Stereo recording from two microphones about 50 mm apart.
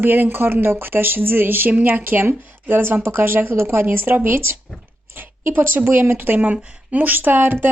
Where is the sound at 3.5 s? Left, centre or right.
Right.